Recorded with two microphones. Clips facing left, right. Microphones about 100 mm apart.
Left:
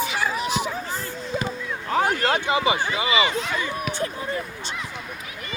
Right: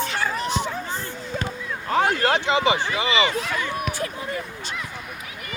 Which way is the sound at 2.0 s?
25° right (ahead or behind).